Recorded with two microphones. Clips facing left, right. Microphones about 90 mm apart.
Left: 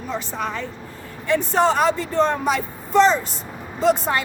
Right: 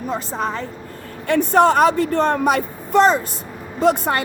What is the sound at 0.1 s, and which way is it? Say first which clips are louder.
Speech: right 2 dB; 35° right (ahead or behind).